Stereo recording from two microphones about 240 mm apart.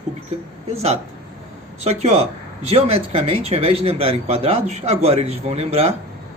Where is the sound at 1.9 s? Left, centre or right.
Right.